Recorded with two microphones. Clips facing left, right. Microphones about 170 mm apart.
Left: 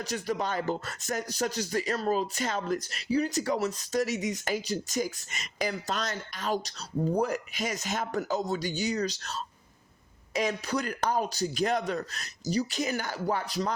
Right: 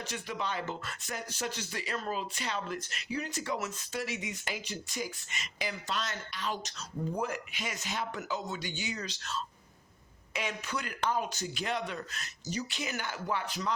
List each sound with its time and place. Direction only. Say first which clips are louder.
0.0 s speech: left 6 dB; 40° left (ahead or behind)